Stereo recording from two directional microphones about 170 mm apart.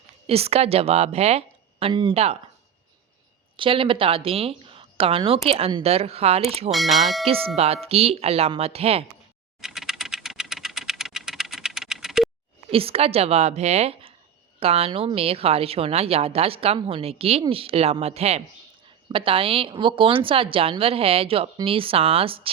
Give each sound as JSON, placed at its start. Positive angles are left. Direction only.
{"t": 0.3, "sound": "speech", "side_deg": -35}
{"t": 3.6, "sound": "speech", "side_deg": -30}
{"t": 6.7, "sound": "speech", "side_deg": 0}
{"t": 7.3, "sound": "speech", "side_deg": -35}
{"t": 9.6, "sound": "computer keyboard", "side_deg": -5}
{"t": 12.7, "sound": "speech", "side_deg": -35}